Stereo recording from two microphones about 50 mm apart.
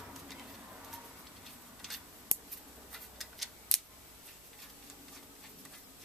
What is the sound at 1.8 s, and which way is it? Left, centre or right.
Scissors, centre.